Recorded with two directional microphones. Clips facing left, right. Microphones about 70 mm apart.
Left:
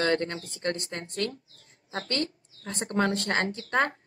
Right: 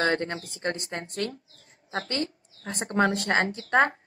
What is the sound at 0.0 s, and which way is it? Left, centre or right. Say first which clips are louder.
Speech: even; right.